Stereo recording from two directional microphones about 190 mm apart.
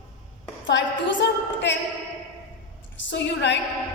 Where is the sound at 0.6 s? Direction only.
70° left (ahead or behind).